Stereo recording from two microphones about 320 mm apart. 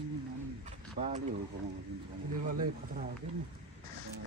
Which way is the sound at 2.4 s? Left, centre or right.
Right.